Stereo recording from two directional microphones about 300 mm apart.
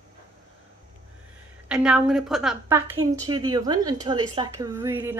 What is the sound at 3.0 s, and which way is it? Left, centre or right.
A woman's voice, centre.